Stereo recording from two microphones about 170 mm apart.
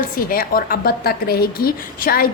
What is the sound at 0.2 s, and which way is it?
A woman's voice, 60° left (ahead or behind).